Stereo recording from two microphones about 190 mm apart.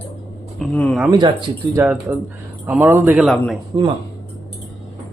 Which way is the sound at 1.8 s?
15° right (ahead or behind).